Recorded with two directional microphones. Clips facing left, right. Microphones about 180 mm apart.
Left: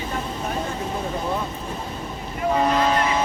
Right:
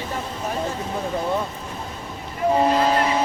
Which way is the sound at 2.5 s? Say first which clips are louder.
Right 1 dB; 30° right (ahead or behind).